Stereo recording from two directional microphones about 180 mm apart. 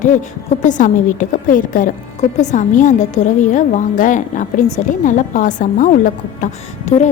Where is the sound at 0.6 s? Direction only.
45° left (ahead or behind).